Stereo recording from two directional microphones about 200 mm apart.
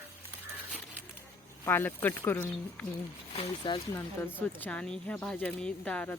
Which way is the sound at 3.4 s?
20° left (ahead or behind).